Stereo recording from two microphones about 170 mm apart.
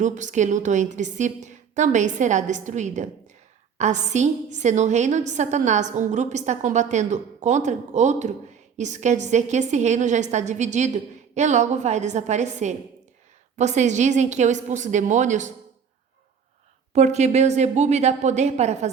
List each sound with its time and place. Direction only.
0.0 s a woman's voice: 45° right (ahead or behind)
16.9 s a woman's voice: 40° right (ahead or behind)